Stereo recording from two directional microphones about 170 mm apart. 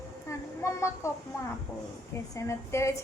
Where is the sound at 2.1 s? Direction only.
15° left (ahead or behind).